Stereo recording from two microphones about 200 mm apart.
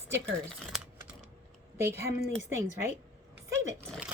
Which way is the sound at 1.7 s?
15° right (ahead or behind).